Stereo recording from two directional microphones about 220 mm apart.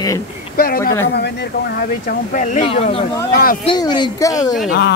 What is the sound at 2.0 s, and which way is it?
Speech, 35° left (ahead or behind).